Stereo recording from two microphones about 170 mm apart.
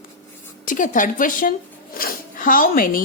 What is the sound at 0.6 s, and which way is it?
A woman's voice, 50° left (ahead or behind).